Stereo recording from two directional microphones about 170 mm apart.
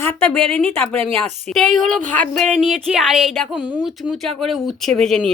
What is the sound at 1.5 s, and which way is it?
Speech, centre (ahead or behind).